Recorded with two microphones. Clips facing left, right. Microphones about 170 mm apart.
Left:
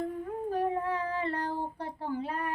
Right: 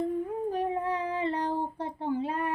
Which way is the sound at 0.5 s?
20° right (ahead or behind).